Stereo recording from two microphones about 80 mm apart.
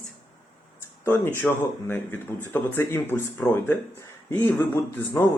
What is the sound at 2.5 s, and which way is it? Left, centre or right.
Speech, left.